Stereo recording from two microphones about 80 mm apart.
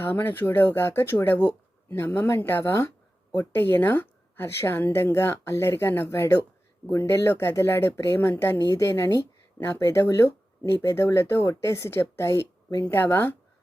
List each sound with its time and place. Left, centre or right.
0.0 s a woman's voice: left